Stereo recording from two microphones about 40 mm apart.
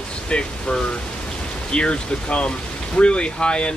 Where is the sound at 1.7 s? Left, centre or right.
Left.